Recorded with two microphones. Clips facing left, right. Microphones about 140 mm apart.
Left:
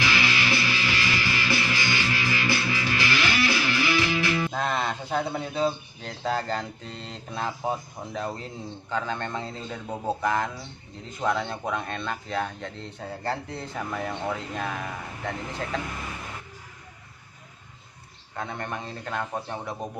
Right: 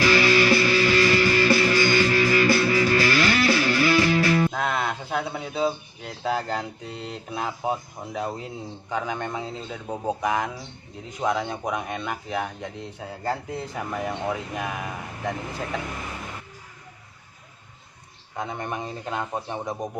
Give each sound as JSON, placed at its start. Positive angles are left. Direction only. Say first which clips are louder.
{"t": 0.0, "sound": "music", "louder": "right 8 dB", "side_deg": -40}
{"t": 4.5, "sound": "speech", "louder": "right 1 dB", "side_deg": -5}
{"t": 18.3, "sound": "speech", "louder": "right 3 dB", "side_deg": -15}